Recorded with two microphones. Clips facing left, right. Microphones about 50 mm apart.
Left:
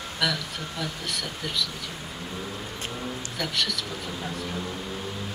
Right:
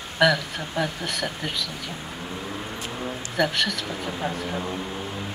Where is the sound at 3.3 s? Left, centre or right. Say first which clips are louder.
Right 7 dB; right.